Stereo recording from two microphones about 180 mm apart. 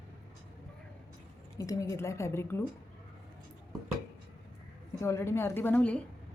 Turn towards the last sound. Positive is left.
turn(degrees=10)  # may be behind; listen again after turning